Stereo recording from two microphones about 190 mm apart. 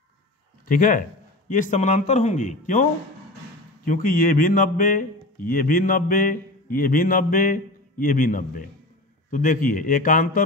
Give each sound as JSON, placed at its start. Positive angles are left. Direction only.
{"t": 0.7, "sound": "a man's voice", "side_deg": 45}